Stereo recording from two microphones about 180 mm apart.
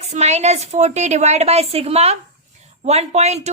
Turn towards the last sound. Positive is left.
turn(degrees=-35)  # may be behind; listen again after turning